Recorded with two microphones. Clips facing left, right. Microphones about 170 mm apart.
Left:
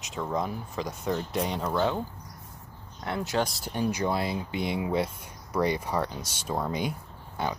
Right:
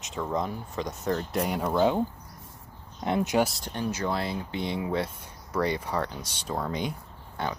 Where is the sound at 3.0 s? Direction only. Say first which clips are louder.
Right 5 dB; 20° right (ahead or behind).